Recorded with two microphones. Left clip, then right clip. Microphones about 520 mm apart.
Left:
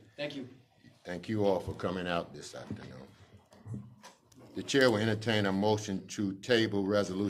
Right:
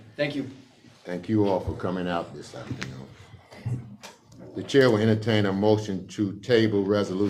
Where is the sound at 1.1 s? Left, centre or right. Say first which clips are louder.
Right 6 dB; left.